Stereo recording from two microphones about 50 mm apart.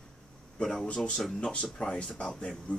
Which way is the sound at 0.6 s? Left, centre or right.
Centre.